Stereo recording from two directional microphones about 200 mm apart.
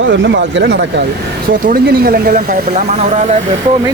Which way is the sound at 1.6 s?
50° right (ahead or behind).